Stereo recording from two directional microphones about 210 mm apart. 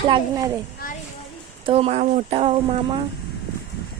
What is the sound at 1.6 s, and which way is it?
Speech, 30° right (ahead or behind).